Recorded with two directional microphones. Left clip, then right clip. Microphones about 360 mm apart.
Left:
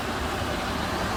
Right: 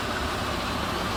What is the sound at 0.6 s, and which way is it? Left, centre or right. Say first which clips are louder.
Vehicle: even; centre.